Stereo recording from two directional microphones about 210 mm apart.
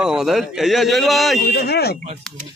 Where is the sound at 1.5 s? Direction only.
50° left (ahead or behind).